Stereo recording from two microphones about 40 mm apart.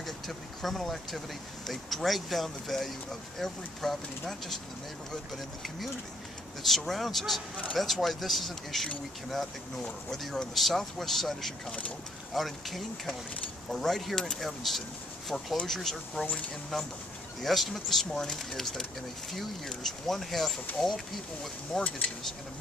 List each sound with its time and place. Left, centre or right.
0.0 s speech: centre
6.6 s speech: centre
14.1 s speech: centre
14.4 s speech: centre
17.4 s speech: centre
21.8 s speech: left